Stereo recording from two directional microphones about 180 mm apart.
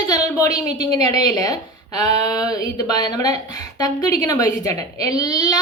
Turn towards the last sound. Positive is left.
turn(degrees=20)  # may be behind; listen again after turning